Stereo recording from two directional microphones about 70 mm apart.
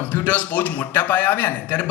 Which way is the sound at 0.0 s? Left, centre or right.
Left.